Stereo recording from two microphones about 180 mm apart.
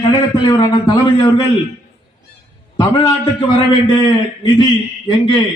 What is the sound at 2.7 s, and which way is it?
A man's voice, 25° left (ahead or behind).